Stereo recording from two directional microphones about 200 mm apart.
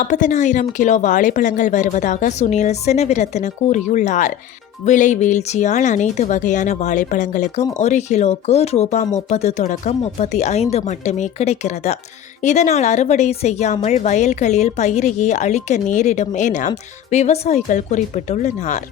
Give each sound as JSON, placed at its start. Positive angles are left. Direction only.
{"t": 0.0, "sound": "speech", "side_deg": 40}